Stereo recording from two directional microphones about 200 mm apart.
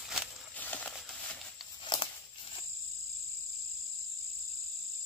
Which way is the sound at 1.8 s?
25° left (ahead or behind).